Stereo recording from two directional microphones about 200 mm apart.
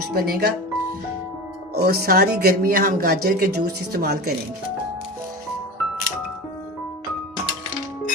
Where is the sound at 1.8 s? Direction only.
50° right (ahead or behind).